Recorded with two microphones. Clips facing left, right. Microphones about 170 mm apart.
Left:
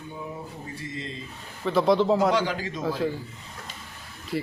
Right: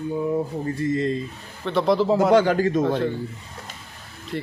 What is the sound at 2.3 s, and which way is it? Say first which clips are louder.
Speech: right 9 dB; 50° right (ahead or behind).